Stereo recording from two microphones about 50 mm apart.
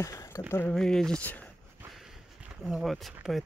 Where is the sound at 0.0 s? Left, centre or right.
Left.